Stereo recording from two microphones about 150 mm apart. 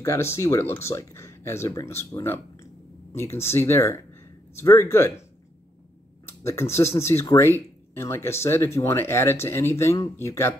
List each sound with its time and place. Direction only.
0.0 s speech: 20° left (ahead or behind)
6.2 s speech: 15° left (ahead or behind)